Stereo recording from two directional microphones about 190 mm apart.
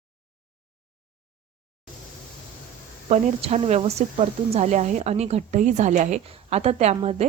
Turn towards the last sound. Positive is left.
turn(degrees=-30)  # may be behind; listen again after turning